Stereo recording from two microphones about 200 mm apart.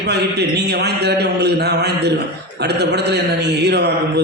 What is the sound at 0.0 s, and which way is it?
A man's voice, 55° right (ahead or behind).